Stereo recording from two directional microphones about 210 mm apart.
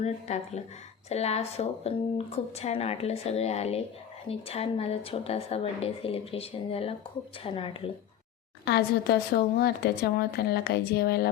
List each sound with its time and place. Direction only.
0.0 s speech: 30° left (ahead or behind)
8.6 s a woman's voice: 50° left (ahead or behind)